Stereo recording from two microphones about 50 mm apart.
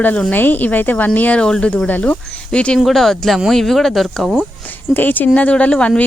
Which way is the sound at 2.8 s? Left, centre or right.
Centre.